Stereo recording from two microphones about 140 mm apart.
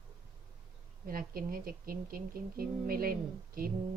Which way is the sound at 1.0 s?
90° right.